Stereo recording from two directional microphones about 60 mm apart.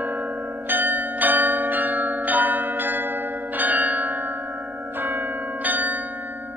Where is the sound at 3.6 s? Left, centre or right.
Right.